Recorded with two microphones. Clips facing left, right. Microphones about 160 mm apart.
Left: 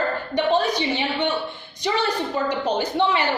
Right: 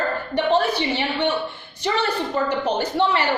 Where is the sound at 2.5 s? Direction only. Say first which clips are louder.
Right 1 dB; 10° left (ahead or behind).